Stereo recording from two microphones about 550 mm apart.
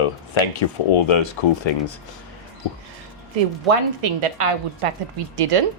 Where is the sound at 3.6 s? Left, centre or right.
Right.